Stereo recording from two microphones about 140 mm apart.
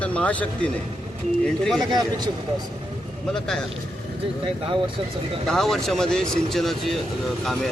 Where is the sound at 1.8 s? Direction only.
30° right (ahead or behind).